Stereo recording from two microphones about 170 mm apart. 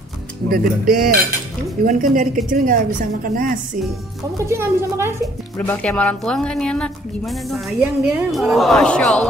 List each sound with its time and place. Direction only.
0.5 s a woman's voice: 55° right (ahead or behind)
4.5 s a woman's voice: 15° right (ahead or behind)
5.7 s a woman's voice: 5° left (ahead or behind)